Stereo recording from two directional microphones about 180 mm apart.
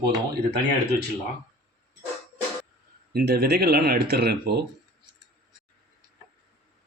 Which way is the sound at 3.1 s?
60° right (ahead or behind).